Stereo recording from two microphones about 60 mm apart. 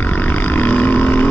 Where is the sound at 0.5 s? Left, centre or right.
Left.